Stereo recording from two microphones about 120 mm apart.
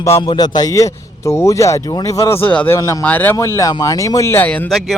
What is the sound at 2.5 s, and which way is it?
Speech, 10° left (ahead or behind).